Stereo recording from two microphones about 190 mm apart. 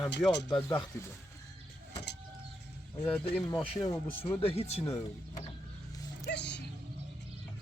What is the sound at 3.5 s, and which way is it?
Speech, 25° left (ahead or behind).